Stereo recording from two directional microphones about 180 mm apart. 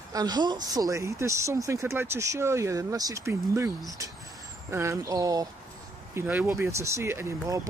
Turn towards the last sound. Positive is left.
turn(degrees=-15)  # may be behind; listen again after turning